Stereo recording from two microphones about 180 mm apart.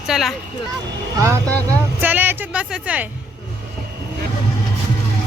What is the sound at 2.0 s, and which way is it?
Speech, 10° right (ahead or behind).